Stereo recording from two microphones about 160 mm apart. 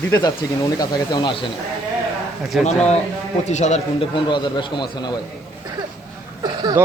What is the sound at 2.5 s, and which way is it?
Speech, 5° right (ahead or behind).